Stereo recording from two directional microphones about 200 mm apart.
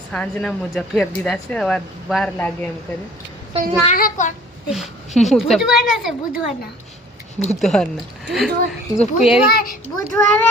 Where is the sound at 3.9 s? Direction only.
40° left (ahead or behind).